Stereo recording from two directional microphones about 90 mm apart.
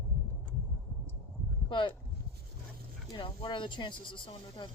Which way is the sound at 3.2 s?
65° left (ahead or behind).